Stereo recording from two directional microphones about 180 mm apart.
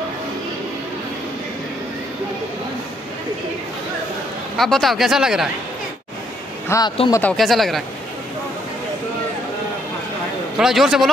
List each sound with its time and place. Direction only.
4.6 s speech: centre (ahead or behind)
6.7 s speech: 15° left (ahead or behind)
7.3 s speech: centre (ahead or behind)
10.6 s speech: centre (ahead or behind)